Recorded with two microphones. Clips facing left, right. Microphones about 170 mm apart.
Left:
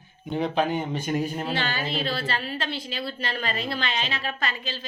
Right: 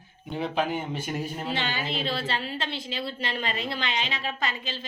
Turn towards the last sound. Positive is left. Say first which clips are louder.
# left 1 dB
turn(degrees=-20)  # may be behind; listen again after turning